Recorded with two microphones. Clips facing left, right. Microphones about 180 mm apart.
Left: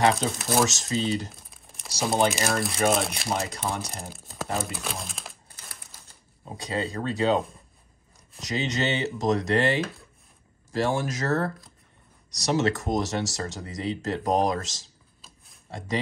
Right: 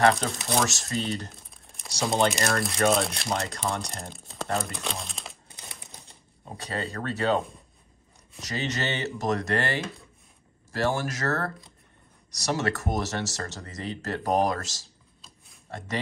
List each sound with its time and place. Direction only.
0.1 s speech: centre (ahead or behind)
0.7 s speech: 20° left (ahead or behind)
1.3 s speech: centre (ahead or behind)
6.5 s speech: 15° left (ahead or behind)
8.4 s speech: 15° left (ahead or behind)